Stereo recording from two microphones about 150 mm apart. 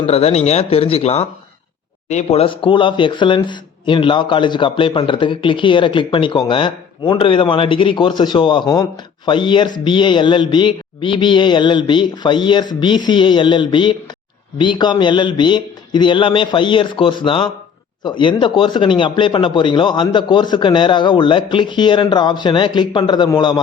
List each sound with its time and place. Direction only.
0.0 s speech: 45° left (ahead or behind)